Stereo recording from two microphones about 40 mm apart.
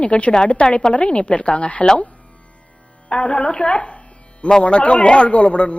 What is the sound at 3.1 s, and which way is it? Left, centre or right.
A woman's voice, left.